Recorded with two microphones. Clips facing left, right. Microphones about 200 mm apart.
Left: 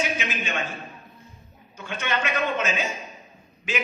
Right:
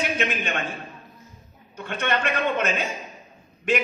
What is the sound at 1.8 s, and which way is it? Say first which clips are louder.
A man's voice: right 3 dB; 60° right (ahead or behind).